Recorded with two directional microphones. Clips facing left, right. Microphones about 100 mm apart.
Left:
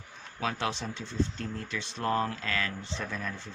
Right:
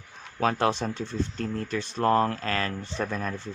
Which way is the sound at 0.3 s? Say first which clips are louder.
Right 8 dB; 45° right (ahead or behind).